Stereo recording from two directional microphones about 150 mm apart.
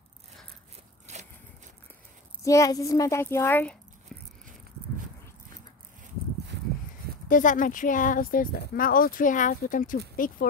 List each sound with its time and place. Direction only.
2.4 s speech: 20° left (ahead or behind)
7.2 s speech: 60° left (ahead or behind)